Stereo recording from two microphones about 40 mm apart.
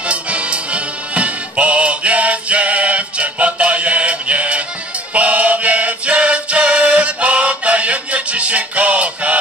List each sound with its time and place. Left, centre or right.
0.0 s music: right